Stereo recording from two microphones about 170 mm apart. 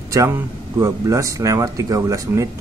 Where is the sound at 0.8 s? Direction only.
20° right (ahead or behind).